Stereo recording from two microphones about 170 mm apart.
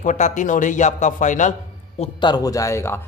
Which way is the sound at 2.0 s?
25° left (ahead or behind).